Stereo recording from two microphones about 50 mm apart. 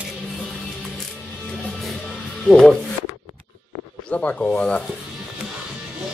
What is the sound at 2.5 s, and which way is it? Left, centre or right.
Speech, centre.